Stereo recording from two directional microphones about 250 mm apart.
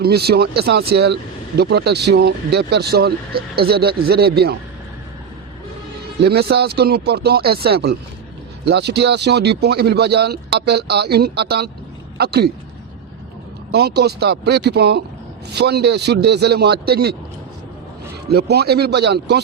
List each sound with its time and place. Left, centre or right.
0.0 s speech: right
6.2 s speech: right
13.7 s speech: right
18.3 s speech: right